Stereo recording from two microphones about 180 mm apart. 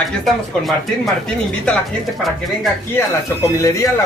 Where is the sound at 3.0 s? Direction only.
15° left (ahead or behind).